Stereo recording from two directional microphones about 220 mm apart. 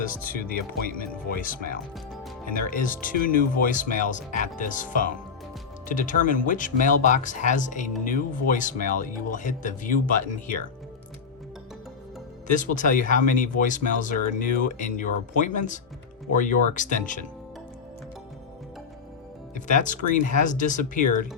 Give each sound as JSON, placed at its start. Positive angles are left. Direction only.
{"t": 0.1, "sound": "speech", "side_deg": 40}
{"t": 2.6, "sound": "speech", "side_deg": 40}
{"t": 12.5, "sound": "speech", "side_deg": 35}
{"t": 19.5, "sound": "speech", "side_deg": 35}